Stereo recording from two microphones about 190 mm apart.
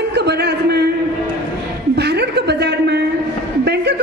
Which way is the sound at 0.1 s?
60° right (ahead or behind).